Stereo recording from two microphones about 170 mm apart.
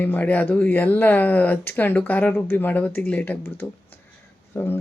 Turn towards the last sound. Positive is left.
turn(degrees=10)  # may be behind; listen again after turning